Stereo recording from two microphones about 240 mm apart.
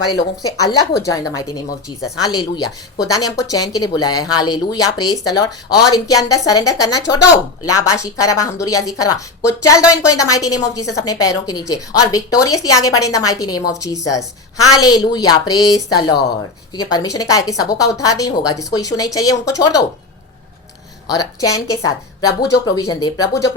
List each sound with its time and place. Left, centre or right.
0.2 s a woman's voice: centre
21.1 s a woman's voice: centre